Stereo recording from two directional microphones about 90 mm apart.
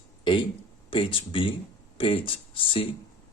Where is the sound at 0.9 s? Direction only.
75° left (ahead or behind).